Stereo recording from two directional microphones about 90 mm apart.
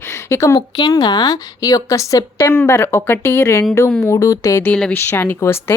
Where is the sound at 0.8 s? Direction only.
45° left (ahead or behind).